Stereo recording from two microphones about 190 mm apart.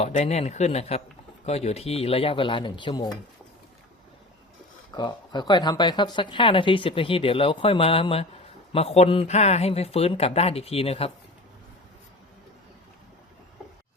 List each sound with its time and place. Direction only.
0.0 s speech: 35° left (ahead or behind)
4.9 s speech: 20° left (ahead or behind)